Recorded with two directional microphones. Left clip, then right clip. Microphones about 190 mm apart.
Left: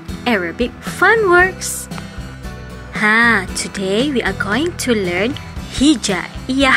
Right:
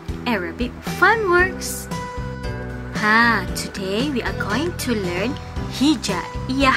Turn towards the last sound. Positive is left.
turn(degrees=20)  # may be behind; listen again after turning